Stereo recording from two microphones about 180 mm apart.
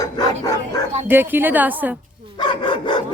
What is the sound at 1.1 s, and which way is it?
Speech, 10° right (ahead or behind).